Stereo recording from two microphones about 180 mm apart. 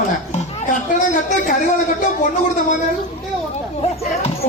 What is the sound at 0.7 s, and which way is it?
Speech, 45° left (ahead or behind).